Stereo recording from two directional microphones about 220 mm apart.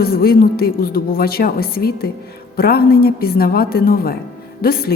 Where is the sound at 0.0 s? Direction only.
45° left (ahead or behind).